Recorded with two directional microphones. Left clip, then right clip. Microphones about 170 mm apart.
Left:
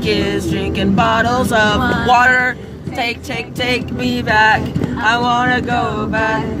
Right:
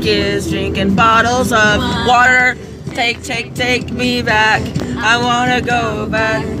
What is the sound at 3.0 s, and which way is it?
Male singing, 5° right (ahead or behind).